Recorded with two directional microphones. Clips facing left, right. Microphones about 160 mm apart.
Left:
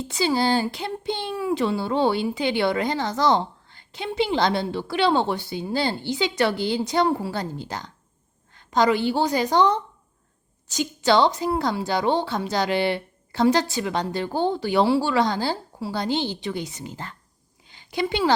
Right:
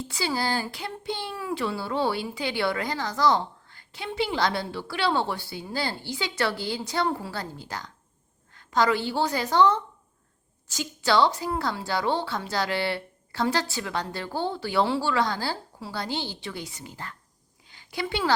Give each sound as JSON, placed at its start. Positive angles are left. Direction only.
{"t": 0.0, "sound": "a woman's voice", "side_deg": 20}